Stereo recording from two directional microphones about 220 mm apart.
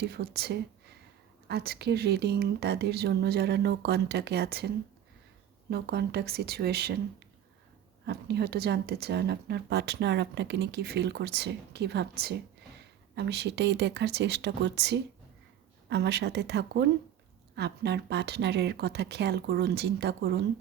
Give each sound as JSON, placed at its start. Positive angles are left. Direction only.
{"t": 0.0, "sound": "a woman's voice", "side_deg": -45}
{"t": 5.7, "sound": "a woman's voice", "side_deg": -50}
{"t": 8.0, "sound": "a woman's voice", "side_deg": -45}